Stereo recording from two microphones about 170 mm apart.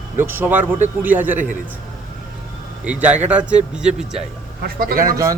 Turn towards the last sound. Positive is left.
turn(degrees=-60)  # may be behind; listen again after turning